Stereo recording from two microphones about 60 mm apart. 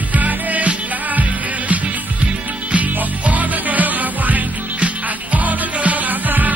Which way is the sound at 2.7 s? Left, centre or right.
Right.